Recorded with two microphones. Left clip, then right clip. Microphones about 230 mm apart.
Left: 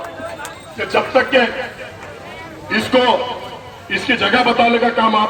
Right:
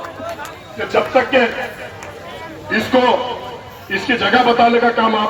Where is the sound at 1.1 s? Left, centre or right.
Left.